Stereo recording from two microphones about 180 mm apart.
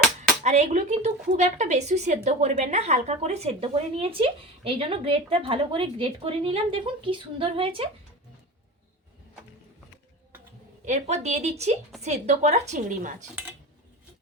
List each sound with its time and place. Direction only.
0.4 s a woman's voice: 40° right (ahead or behind)
10.8 s a woman's voice: 40° right (ahead or behind)